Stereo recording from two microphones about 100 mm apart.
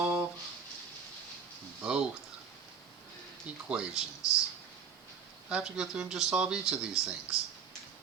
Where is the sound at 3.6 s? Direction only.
10° right (ahead or behind).